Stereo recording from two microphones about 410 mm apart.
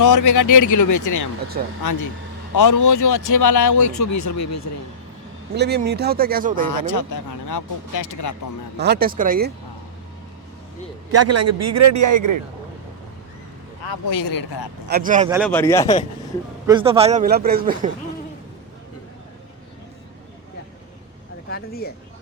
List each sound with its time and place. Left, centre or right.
0.0 s speech: left
5.5 s speech: right
6.7 s speech: left
8.8 s speech: right
11.1 s a man's voice: right
14.1 s speech: left
14.3 s speech: left
14.8 s speech: right
15.3 s speech: centre
16.6 s speech: centre
21.5 s a sound: left